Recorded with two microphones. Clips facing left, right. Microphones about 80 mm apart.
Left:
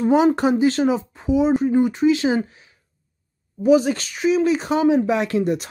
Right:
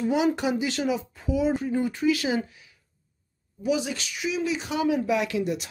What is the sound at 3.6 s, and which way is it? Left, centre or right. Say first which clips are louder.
Speech: left 10 dB; left.